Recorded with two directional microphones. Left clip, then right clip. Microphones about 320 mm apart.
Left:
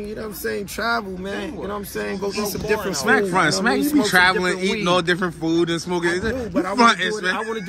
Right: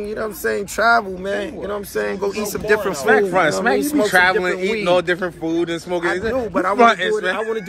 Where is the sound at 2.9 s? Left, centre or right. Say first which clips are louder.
Even; centre.